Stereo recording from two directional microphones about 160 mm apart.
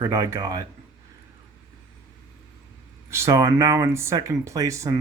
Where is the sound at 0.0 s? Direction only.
15° right (ahead or behind).